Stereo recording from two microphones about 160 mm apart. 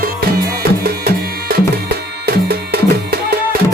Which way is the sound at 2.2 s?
80° right.